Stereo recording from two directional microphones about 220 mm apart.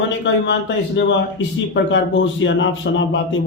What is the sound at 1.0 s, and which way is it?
A man's voice, 55° left (ahead or behind).